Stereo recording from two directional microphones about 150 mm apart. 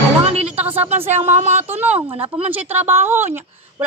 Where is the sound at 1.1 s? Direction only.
50° right (ahead or behind).